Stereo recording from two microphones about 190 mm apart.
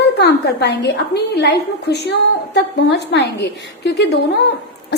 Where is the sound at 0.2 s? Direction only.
60° left (ahead or behind).